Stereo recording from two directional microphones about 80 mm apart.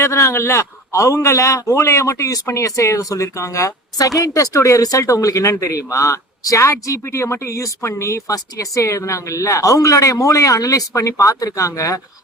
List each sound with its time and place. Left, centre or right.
0.0 s speech: left